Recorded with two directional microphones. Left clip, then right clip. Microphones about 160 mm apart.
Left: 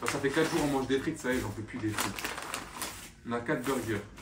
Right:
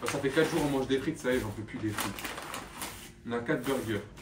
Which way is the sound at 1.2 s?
5° left (ahead or behind).